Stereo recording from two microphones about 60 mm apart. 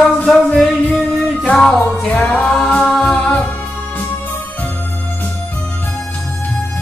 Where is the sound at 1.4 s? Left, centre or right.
Centre.